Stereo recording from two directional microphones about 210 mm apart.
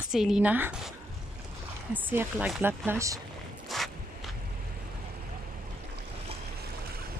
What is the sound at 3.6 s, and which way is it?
Walk, centre (ahead or behind).